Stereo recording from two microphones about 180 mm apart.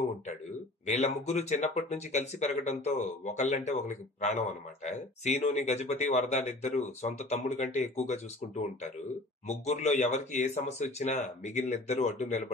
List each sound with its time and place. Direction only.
0.8 s speech: 40° left (ahead or behind)
9.5 s speech: 40° left (ahead or behind)